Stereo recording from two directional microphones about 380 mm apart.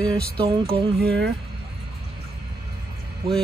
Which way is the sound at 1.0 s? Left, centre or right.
Right.